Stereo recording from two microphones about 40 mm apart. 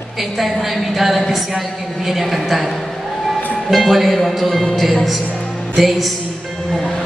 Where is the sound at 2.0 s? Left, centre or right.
Centre.